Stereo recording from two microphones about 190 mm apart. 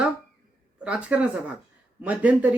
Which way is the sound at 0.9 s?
5° right (ahead or behind).